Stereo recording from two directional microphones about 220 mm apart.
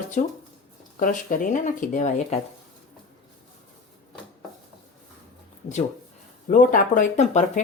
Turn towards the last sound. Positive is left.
turn(degrees=35)  # may be behind; listen again after turning